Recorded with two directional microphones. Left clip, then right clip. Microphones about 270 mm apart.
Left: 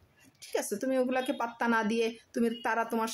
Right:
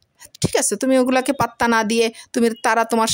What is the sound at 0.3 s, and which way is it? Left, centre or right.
Speech, right.